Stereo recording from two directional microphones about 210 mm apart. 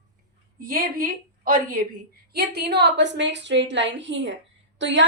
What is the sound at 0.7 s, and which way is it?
A woman's voice, 45° right (ahead or behind).